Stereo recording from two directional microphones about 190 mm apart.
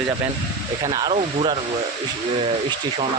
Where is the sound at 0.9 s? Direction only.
20° right (ahead or behind).